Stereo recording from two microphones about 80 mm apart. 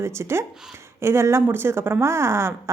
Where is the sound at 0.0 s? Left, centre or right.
Right.